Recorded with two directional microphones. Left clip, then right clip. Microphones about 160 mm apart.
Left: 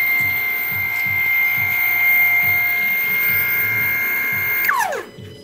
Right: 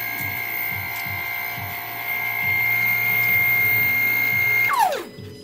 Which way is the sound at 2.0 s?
20° right (ahead or behind).